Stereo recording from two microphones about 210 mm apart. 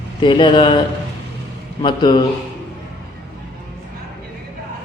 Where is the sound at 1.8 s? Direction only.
20° left (ahead or behind).